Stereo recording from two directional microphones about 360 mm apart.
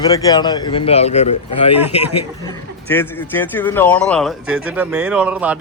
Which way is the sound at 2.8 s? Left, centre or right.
Centre.